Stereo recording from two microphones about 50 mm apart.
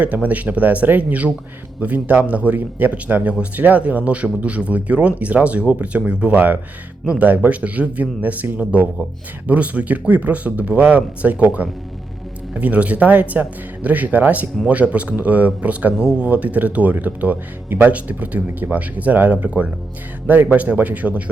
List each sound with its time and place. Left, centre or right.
0.0 s speech: right